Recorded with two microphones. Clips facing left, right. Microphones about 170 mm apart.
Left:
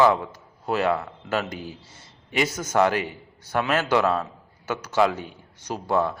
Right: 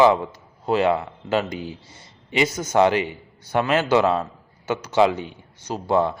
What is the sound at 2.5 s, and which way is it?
Speech, 10° right (ahead or behind).